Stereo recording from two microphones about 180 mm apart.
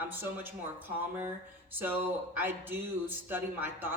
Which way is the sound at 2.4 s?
10° right (ahead or behind).